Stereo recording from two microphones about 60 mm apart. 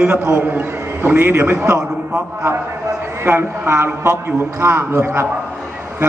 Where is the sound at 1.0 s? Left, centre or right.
Right.